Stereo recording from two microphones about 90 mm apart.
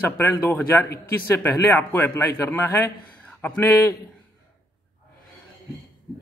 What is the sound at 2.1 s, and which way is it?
A man's voice, 40° left (ahead or behind).